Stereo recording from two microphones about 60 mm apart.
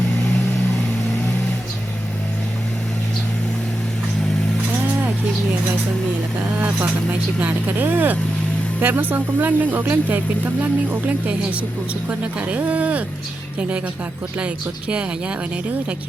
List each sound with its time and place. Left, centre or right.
6.6 s speech: right
12.2 s speech: right